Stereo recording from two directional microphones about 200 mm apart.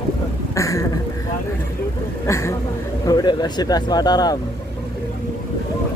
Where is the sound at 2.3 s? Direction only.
15° left (ahead or behind).